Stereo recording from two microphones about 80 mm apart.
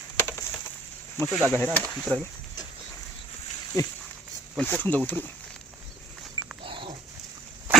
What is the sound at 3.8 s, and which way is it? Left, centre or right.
Speech, left.